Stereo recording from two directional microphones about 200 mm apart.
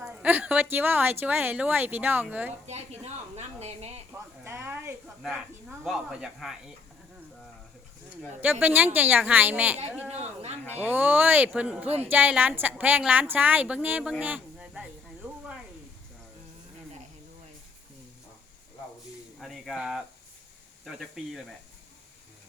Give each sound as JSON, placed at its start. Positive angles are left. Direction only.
{"t": 0.0, "sound": "a woman's voice", "side_deg": -5}
{"t": 2.6, "sound": "speech", "side_deg": -35}
{"t": 4.1, "sound": "a woman's voice", "side_deg": -10}
{"t": 5.2, "sound": "speech", "side_deg": 0}
{"t": 8.4, "sound": "a woman's voice", "side_deg": -10}
{"t": 10.1, "sound": "speech", "side_deg": -35}
{"t": 10.7, "sound": "a woman's voice", "side_deg": -10}
{"t": 19.4, "sound": "speech", "side_deg": 0}